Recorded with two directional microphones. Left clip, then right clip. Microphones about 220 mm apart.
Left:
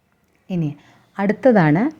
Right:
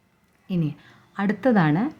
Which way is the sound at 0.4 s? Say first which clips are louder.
Left 3 dB; 10° left (ahead or behind).